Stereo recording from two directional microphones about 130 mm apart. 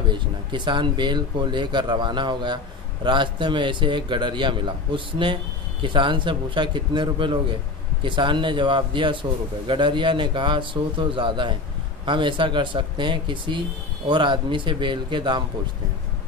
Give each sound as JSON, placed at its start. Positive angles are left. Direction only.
{"t": 0.1, "sound": "speech", "side_deg": -35}